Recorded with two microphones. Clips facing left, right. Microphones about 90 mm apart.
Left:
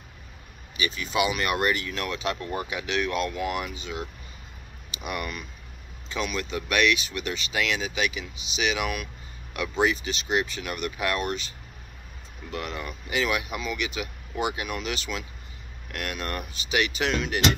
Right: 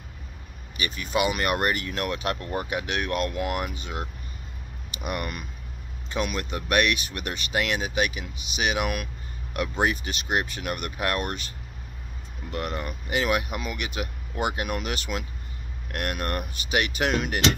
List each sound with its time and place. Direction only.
0.7 s speech: 45° right (ahead or behind)
12.4 s speech: 45° right (ahead or behind)